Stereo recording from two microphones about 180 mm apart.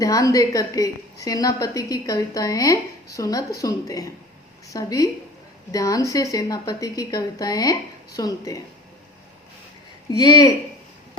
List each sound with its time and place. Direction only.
0.0 s a woman's voice: 20° left (ahead or behind)
10.1 s a woman's voice: 20° left (ahead or behind)